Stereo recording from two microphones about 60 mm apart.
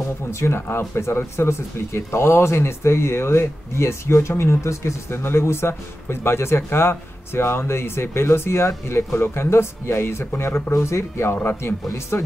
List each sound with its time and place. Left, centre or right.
0.3 s speech: left